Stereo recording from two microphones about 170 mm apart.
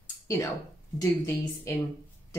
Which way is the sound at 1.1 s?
20° left (ahead or behind).